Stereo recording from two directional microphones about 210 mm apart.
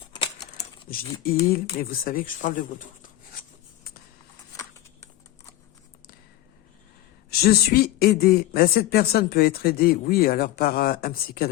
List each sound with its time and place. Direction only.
0.1 s speech: 25° left (ahead or behind)
7.3 s a man's voice: 50° left (ahead or behind)